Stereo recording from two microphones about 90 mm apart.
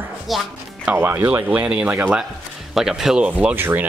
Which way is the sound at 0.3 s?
Centre (ahead or behind).